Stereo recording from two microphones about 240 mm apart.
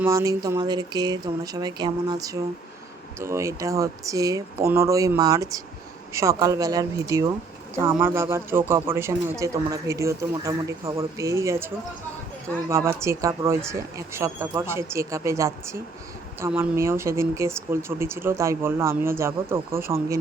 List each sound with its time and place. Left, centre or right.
0.0 s a man's voice: centre